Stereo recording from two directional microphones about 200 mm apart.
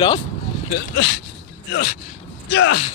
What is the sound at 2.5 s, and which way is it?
Speech, 75° left (ahead or behind).